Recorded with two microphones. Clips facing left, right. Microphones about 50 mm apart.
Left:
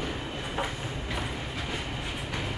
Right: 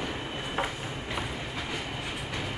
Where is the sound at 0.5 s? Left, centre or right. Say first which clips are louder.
Right 1 dB; centre.